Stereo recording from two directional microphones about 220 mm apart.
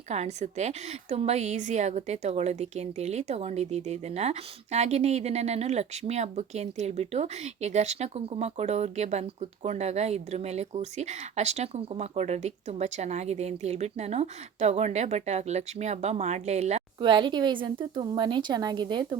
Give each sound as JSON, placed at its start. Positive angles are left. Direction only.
{"t": 0.1, "sound": "a woman's voice", "side_deg": -30}